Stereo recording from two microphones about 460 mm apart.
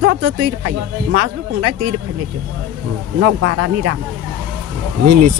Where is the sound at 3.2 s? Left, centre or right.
Right.